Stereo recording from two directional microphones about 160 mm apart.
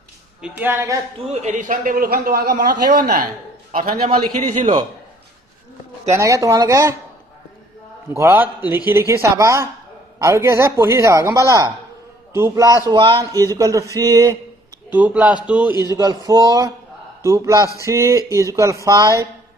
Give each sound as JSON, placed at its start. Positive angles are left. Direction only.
{"t": 0.4, "sound": "speech", "side_deg": -10}
{"t": 1.3, "sound": "a man's voice", "side_deg": -50}
{"t": 6.0, "sound": "speech", "side_deg": -20}
{"t": 8.2, "sound": "a man's voice", "side_deg": -10}
{"t": 12.9, "sound": "speech", "side_deg": -30}
{"t": 14.9, "sound": "speech", "side_deg": -10}
{"t": 15.8, "sound": "speech", "side_deg": -20}